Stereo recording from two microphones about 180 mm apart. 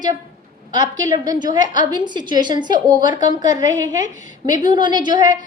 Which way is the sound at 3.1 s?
45° left (ahead or behind).